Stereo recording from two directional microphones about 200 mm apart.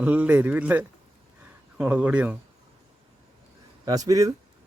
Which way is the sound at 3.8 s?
15° right (ahead or behind).